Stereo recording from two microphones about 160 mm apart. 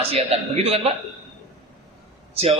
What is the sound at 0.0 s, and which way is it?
Speech, 40° right (ahead or behind).